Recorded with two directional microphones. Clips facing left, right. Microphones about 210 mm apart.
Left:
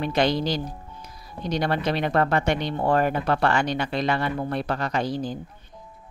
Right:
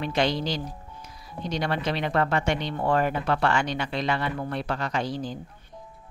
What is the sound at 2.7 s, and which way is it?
Speech, 40° left (ahead or behind).